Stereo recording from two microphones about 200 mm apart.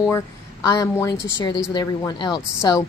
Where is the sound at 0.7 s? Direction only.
15° left (ahead or behind).